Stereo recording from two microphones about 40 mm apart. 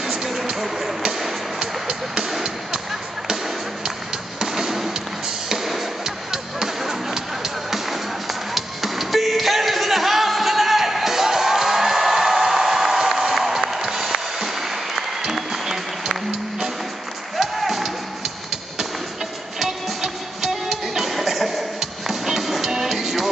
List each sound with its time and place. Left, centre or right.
0.0 s a sound: centre
1.0 s music: centre
4.4 s printer: centre
5.5 s a sound: centre
17.4 s music: centre
19.6 s music: centre